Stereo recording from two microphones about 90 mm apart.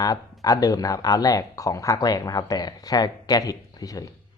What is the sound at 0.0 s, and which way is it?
Speech, 40° left (ahead or behind).